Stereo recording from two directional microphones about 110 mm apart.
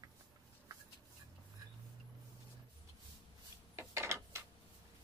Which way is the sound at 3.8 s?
25° right (ahead or behind).